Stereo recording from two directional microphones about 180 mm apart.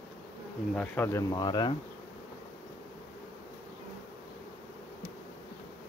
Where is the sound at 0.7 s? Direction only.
10° left (ahead or behind).